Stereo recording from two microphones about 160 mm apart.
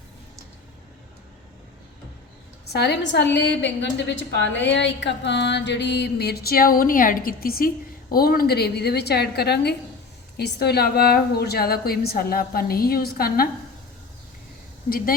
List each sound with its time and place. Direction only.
2.7 s mantra: 90° left; by 7.7 s 65° left (ahead or behind)
8.1 s a woman's voice: 70° left (ahead or behind)
14.8 s speech: 65° left (ahead or behind)